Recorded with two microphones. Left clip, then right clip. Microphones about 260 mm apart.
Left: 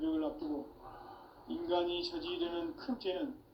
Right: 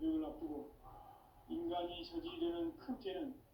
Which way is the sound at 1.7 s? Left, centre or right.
Left.